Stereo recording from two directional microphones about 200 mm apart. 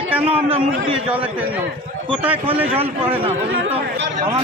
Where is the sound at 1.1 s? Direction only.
10° right (ahead or behind).